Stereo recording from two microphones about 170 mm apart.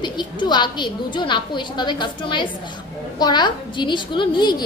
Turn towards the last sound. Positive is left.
turn(degrees=25)  # may be behind; listen again after turning